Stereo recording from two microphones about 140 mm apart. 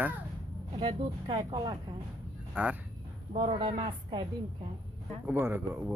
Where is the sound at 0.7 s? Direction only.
35° right (ahead or behind).